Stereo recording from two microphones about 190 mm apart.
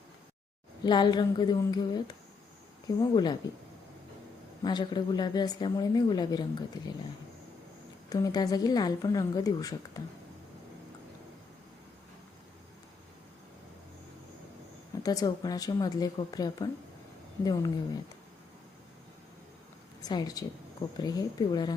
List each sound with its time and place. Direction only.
0.9 s a woman's voice: 25° left (ahead or behind)
4.6 s a woman's voice: 20° left (ahead or behind)
8.1 s a woman's voice: 20° left (ahead or behind)
15.0 s a woman's voice: 20° left (ahead or behind)
20.0 s a woman's voice: 20° left (ahead or behind)